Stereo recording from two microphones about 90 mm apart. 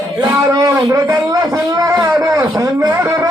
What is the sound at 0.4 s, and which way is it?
A man's voice, 40° right (ahead or behind).